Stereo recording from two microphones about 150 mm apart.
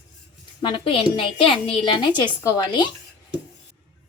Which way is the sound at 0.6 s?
35° left (ahead or behind).